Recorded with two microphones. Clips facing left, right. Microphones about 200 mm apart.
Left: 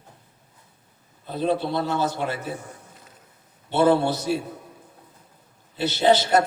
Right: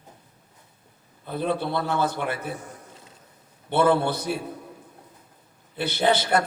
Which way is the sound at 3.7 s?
55° right (ahead or behind).